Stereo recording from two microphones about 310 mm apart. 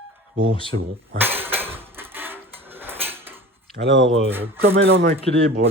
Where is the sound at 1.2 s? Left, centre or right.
Centre.